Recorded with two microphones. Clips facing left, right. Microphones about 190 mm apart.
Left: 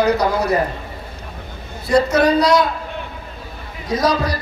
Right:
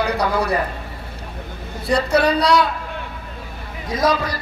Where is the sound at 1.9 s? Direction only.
30° right (ahead or behind).